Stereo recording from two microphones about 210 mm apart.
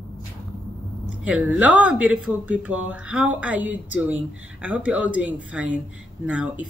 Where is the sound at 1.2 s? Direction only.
5° right (ahead or behind).